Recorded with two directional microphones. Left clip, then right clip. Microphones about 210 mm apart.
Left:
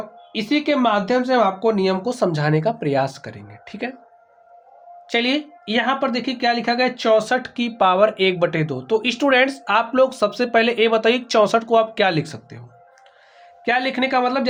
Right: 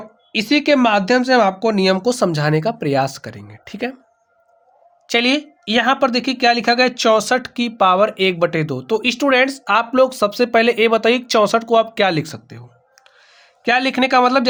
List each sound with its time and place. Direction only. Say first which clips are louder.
0.3 s speech: right 5 dB; 55° right (ahead or behind); by 3.9 s 40° right (ahead or behind)
5.0 s speech: right 4 dB; 40° right (ahead or behind)
13.7 s speech: right 4 dB; 45° right (ahead or behind)